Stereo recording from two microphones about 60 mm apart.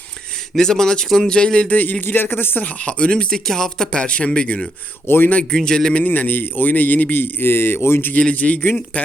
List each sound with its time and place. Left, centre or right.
0.5 s speech: centre; by 2.6 s left
2.6 s speech: left
5.0 s a man's voice: left
5.3 s speech: left
6.0 s a man's voice: left
8.2 s speech: left